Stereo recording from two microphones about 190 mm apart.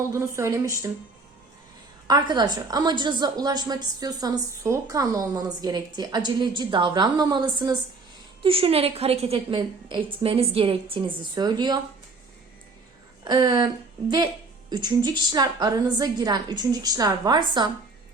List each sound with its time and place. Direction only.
0.0 s speech: 15° right (ahead or behind)
2.0 s a woman's voice: 20° right (ahead or behind)
13.2 s a woman's voice: 20° right (ahead or behind)
14.7 s a woman's voice: 20° right (ahead or behind)